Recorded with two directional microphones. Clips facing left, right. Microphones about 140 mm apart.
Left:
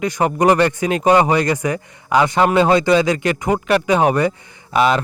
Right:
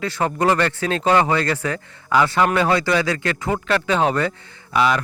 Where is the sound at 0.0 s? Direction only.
15° left (ahead or behind).